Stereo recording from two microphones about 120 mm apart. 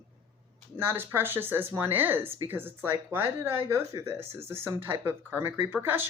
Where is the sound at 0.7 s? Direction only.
20° right (ahead or behind).